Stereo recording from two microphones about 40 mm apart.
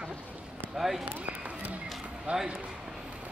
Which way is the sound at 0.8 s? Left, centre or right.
Centre.